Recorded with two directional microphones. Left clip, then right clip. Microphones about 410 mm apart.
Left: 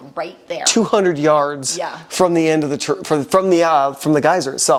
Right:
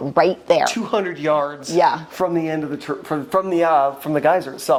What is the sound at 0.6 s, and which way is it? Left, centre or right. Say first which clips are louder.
Speech: left 6 dB; left.